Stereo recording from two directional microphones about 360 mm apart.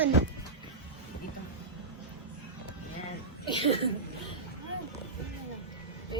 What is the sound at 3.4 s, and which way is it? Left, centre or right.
Speech, centre.